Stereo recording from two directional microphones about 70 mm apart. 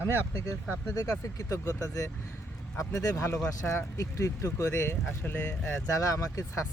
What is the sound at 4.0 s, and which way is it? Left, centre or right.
Speech, left.